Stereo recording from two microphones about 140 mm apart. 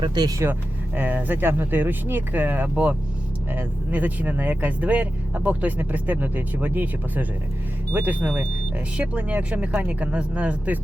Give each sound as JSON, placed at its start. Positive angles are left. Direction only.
{"t": 0.0, "sound": "speech", "side_deg": -30}